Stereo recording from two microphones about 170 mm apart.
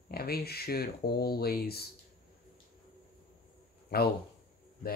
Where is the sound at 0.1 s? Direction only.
65° left (ahead or behind).